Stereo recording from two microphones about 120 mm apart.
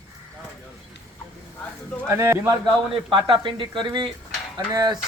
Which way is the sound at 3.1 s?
45° right (ahead or behind).